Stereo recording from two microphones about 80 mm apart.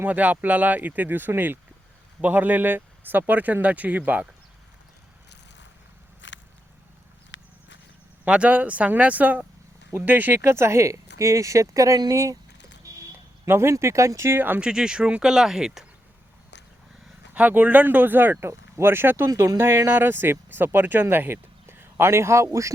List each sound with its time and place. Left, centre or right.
0.0 s speech: centre
8.2 s speech: centre; by 12.4 s right
13.4 s speech: right
14.6 s speech: centre
17.3 s speech: centre; by 22.4 s right